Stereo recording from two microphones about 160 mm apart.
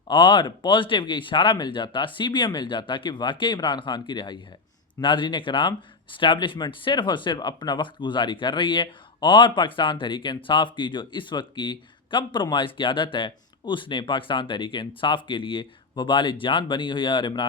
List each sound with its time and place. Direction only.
0.1 s speech: 30° left (ahead or behind)